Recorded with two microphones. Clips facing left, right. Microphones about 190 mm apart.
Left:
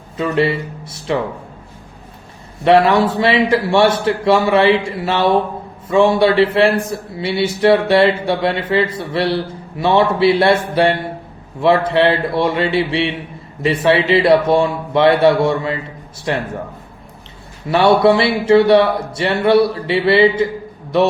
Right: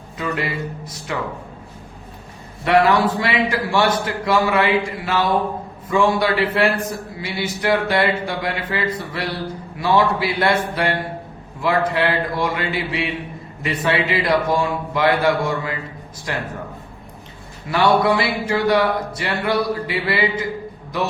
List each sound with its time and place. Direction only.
0.2 s a man's voice: 25° left (ahead or behind)
2.6 s a man's voice: 25° left (ahead or behind)
17.7 s a man's voice: 25° left (ahead or behind)